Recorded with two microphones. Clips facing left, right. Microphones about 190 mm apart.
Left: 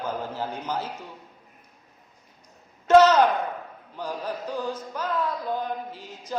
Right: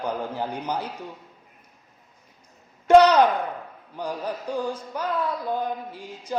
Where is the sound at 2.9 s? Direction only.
15° right (ahead or behind).